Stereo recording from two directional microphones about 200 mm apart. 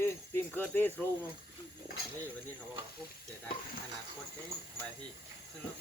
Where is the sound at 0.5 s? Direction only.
10° left (ahead or behind).